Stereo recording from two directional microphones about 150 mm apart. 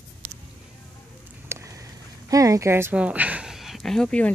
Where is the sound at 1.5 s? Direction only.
15° right (ahead or behind).